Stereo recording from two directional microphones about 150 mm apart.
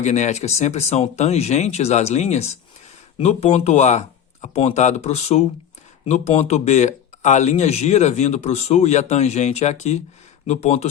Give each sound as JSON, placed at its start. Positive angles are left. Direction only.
{"t": 0.0, "sound": "speech", "side_deg": 50}